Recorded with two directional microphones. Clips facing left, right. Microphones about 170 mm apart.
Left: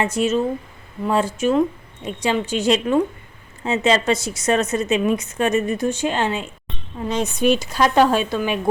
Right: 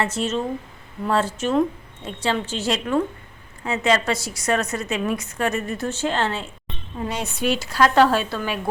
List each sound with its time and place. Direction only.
0.0 s a woman's voice: 10° left (ahead or behind)